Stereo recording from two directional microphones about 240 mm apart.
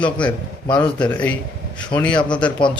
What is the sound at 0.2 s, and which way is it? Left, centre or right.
Speech, centre.